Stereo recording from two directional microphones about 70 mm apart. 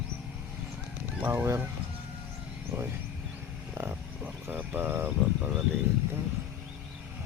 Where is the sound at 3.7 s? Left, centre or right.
Right.